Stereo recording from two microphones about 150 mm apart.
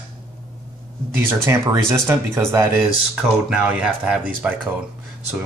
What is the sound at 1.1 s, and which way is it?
Speech, 15° right (ahead or behind).